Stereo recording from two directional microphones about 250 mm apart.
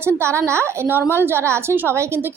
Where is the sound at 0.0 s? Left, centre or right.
Centre.